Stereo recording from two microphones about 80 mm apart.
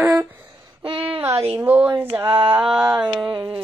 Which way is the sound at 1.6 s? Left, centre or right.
Right.